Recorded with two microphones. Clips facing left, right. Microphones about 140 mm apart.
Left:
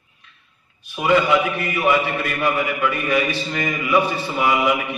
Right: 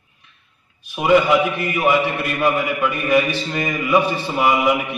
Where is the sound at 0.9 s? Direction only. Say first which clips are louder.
Right 2 dB; 15° right (ahead or behind).